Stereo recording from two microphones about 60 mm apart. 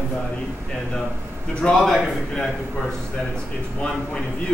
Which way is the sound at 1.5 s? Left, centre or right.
Centre.